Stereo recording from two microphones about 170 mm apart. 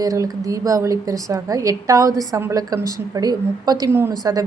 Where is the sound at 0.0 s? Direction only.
20° right (ahead or behind).